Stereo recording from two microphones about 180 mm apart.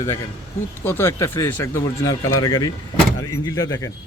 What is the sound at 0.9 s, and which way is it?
Speech, 10° left (ahead or behind).